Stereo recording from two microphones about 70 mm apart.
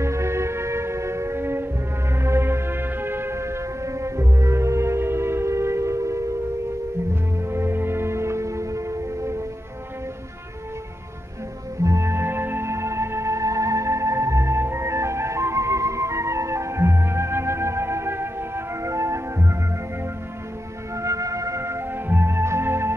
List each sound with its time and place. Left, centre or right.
0.0 s music: right
7.4 s music: right
11.8 s music: right
20.9 s music: right